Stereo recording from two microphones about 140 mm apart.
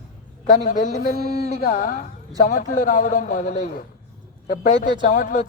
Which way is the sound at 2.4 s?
70° left (ahead or behind).